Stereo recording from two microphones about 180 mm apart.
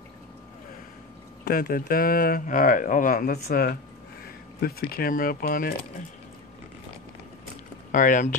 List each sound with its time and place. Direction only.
1.4 s speech: 55° left (ahead or behind)
7.9 s speech: 45° left (ahead or behind)